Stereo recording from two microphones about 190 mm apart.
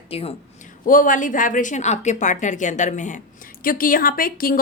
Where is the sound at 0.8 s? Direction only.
45° left (ahead or behind).